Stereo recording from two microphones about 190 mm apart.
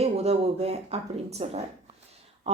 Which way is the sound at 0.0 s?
35° right (ahead or behind).